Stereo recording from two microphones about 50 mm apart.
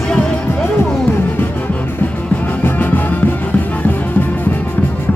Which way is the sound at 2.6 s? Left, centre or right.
Left.